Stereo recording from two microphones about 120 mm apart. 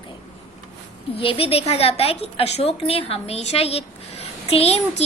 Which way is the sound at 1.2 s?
50° left (ahead or behind).